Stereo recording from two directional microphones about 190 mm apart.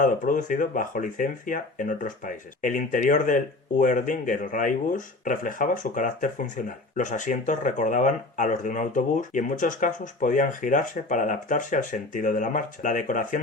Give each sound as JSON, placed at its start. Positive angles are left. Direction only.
{"t": 0.0, "sound": "speech", "side_deg": 45}